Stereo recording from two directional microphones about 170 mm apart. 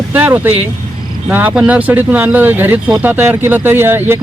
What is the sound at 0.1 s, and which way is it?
Speech, 10° right (ahead or behind).